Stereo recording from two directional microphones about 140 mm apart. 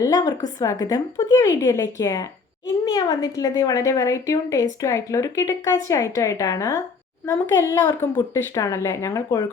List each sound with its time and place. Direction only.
0.0 s a woman's voice: 30° left (ahead or behind)